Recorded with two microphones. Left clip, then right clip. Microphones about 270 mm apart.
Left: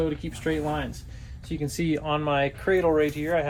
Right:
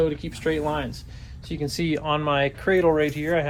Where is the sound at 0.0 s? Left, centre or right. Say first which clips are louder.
Right 4 dB; centre.